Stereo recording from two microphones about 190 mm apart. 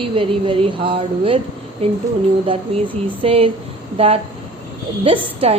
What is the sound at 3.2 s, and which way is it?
Speech, 30° right (ahead or behind).